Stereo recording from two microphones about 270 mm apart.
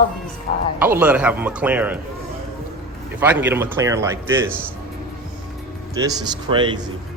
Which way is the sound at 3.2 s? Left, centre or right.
Centre.